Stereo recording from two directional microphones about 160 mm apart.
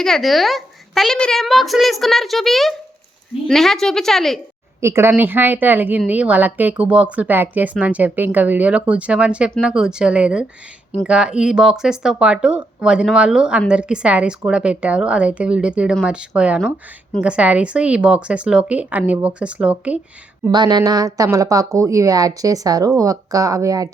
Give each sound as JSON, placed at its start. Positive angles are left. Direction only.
{"t": 0.0, "sound": "a child's voice", "side_deg": 0}
{"t": 4.8, "sound": "speech", "side_deg": -15}
{"t": 20.5, "sound": "a woman's voice", "side_deg": -25}